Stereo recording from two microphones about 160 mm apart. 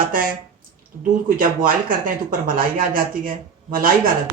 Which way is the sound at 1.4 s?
60° right (ahead or behind).